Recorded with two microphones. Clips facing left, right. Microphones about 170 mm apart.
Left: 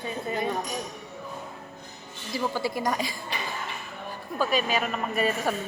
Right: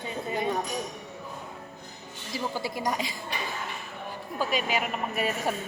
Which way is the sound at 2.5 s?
15° right (ahead or behind).